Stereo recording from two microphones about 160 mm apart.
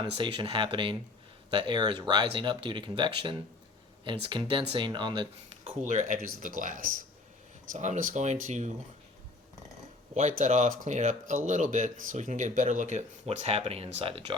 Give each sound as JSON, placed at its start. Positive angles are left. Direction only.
{"t": 0.0, "sound": "speech", "side_deg": -30}
{"t": 5.5, "sound": "speech", "side_deg": -45}
{"t": 6.1, "sound": "speech", "side_deg": -60}
{"t": 10.2, "sound": "speech", "side_deg": -45}